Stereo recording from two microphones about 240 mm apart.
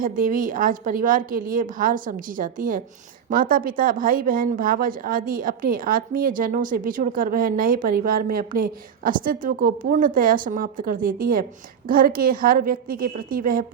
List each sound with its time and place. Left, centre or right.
0.0 s speech: right